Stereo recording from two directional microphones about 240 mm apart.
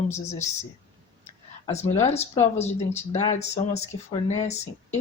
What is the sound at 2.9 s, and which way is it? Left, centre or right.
Speech, centre.